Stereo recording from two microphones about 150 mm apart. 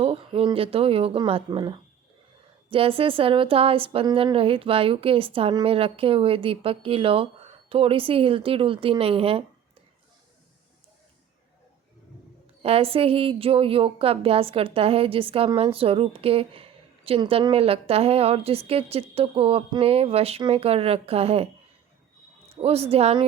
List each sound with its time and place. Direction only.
0.0 s a woman's voice: 40° right (ahead or behind)
12.6 s a woman's voice: 40° right (ahead or behind)